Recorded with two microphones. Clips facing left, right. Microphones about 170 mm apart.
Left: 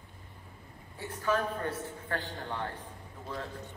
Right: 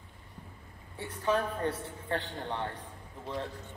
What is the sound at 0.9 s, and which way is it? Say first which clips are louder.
A man's voice: right 1 dB; 25° right (ahead or behind).